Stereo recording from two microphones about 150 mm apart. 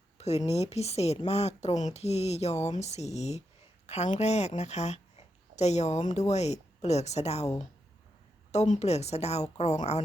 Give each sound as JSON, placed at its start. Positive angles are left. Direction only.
{"t": 0.2, "sound": "a woman's voice", "side_deg": 45}
{"t": 8.5, "sound": "speech", "side_deg": 50}